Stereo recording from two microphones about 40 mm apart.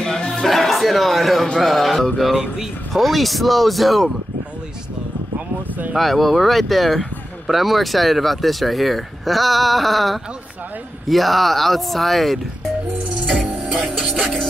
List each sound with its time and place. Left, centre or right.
0.0 s music: centre
0.3 s music: centre
1.6 s speech: centre
2.4 s speech: centre
2.9 s speech: centre
5.9 s speech: centre
13.3 s music: centre